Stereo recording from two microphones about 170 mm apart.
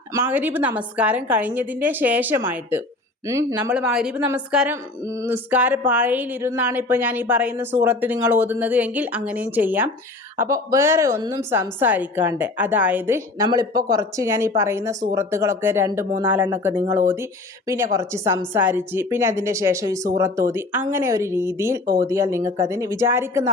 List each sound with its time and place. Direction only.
0.1 s speech: 15° right (ahead or behind)
5.0 s speech: 15° right (ahead or behind)
17.9 s speech: 15° right (ahead or behind)